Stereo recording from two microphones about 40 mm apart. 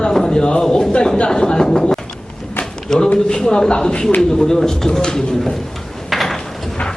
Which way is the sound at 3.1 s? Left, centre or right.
Centre.